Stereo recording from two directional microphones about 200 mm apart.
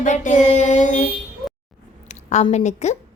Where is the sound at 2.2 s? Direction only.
35° left (ahead or behind).